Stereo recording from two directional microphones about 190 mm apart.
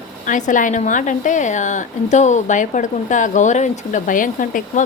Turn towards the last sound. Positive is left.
turn(degrees=45)  # may be behind; listen again after turning